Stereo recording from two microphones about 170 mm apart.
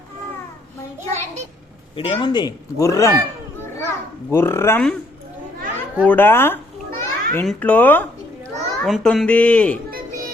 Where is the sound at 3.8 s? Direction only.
15° left (ahead or behind).